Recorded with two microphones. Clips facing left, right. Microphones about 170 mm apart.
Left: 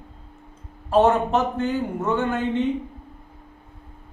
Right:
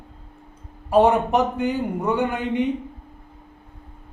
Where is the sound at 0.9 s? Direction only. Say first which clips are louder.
Right 1 dB; 15° right (ahead or behind).